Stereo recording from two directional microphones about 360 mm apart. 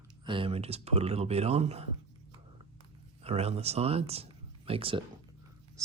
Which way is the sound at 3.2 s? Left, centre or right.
Centre.